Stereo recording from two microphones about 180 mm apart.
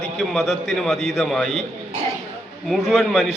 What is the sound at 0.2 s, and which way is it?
A man's voice, centre (ahead or behind).